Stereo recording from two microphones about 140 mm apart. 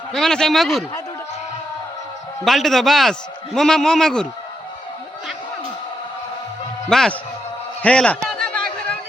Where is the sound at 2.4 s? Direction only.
Centre (ahead or behind).